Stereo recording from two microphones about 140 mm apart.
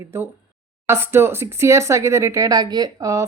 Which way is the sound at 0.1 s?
20° right (ahead or behind).